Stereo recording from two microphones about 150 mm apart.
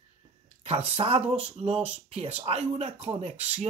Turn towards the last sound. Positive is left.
turn(degrees=-45)  # may be behind; listen again after turning